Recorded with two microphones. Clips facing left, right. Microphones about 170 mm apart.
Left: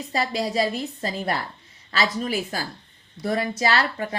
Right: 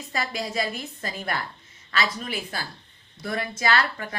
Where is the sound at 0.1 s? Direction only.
35° left (ahead or behind).